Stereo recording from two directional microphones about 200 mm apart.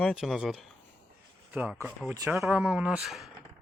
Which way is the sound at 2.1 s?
15° right (ahead or behind).